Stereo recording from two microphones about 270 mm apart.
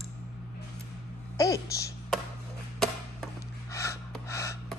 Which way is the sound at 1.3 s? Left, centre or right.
Centre.